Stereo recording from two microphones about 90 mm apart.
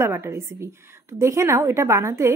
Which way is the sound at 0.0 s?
30° right (ahead or behind).